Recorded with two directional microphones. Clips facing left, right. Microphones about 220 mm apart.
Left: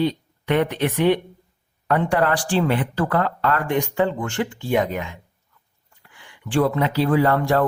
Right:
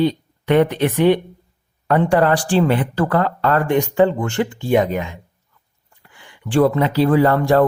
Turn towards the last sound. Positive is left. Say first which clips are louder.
# right 4 dB
turn(degrees=-35)  # may be behind; listen again after turning